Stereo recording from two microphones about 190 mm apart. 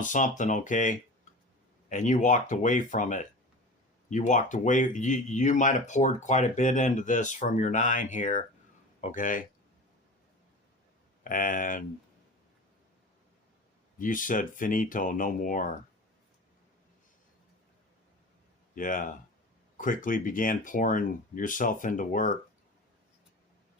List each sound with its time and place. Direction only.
0.0 s speech: 40° left (ahead or behind)
11.2 s speech: 45° left (ahead or behind)
14.0 s speech: 45° left (ahead or behind)
18.7 s speech: 45° left (ahead or behind)